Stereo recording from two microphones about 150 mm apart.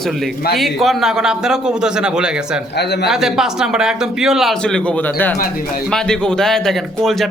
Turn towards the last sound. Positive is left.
turn(degrees=0)  # may be behind; listen again after turning